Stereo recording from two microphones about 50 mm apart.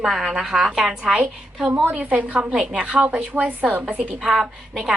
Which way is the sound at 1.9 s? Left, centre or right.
Right.